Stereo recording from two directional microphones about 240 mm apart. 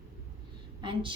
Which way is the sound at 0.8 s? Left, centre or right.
Right.